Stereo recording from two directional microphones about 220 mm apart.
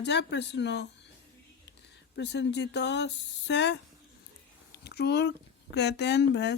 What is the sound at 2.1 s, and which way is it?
Speech, 50° left (ahead or behind).